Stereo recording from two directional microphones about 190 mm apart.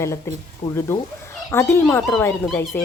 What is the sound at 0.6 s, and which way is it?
Speech, 30° left (ahead or behind).